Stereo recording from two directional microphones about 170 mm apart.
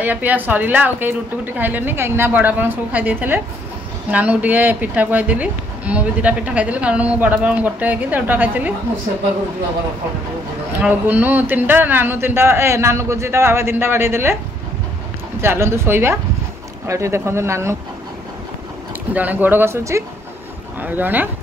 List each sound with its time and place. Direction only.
0.0 s speech: 10° right (ahead or behind)
10.8 s speech: 10° right (ahead or behind)
15.4 s speech: 15° right (ahead or behind)
19.1 s speech: 10° right (ahead or behind)